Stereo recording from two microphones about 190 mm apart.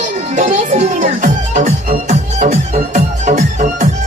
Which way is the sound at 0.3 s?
40° right (ahead or behind).